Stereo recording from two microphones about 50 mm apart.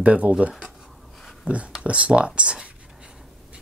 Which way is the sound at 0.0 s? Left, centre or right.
Right.